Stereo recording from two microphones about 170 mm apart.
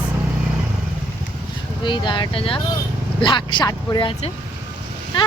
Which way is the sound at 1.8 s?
25° left (ahead or behind).